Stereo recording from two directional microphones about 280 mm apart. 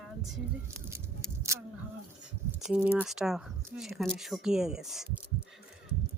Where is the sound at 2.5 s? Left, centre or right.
Centre.